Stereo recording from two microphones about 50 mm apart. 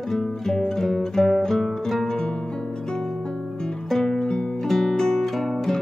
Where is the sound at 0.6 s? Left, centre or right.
Centre.